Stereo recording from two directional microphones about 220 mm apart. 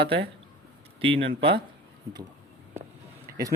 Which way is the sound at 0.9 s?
25° right (ahead or behind).